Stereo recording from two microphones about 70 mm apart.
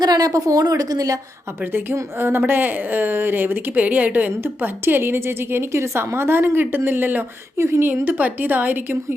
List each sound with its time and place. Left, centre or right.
0.0 s a woman's voice: right
2.1 s a woman's voice: right